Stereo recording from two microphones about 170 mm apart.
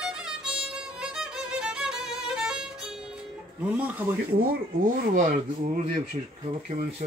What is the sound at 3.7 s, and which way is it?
Speech, 10° right (ahead or behind).